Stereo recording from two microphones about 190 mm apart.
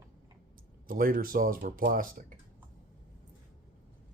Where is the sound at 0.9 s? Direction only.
50° right (ahead or behind).